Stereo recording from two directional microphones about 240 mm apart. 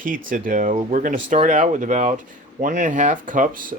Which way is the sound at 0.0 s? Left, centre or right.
Right.